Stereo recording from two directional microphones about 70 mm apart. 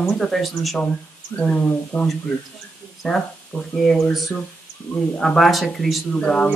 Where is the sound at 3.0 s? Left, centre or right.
Centre.